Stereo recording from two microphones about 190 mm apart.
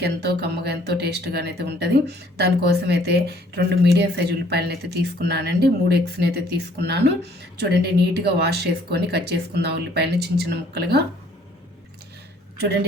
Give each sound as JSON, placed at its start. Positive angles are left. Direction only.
{"t": 0.0, "sound": "speech", "side_deg": -60}